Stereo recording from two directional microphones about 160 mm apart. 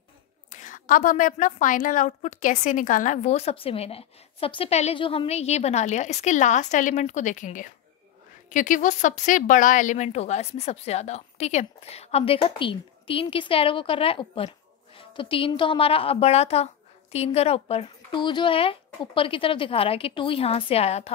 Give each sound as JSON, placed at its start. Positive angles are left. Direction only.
{"t": 0.5, "sound": "a woman's voice", "side_deg": 50}